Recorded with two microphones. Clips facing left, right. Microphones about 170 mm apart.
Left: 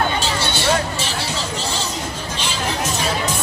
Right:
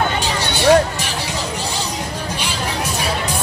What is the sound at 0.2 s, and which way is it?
Hubbub, 15° right (ahead or behind).